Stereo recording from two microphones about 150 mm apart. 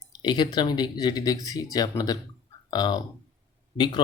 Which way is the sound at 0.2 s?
30° left (ahead or behind).